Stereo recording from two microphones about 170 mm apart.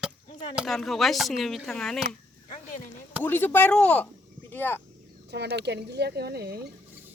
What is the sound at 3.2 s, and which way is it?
Speech, 10° left (ahead or behind).